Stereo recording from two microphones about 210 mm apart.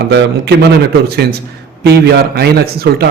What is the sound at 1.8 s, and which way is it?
A man's voice, 50° right (ahead or behind).